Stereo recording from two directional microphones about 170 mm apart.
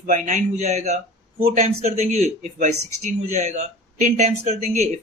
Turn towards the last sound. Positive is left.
turn(degrees=-40)  # may be behind; listen again after turning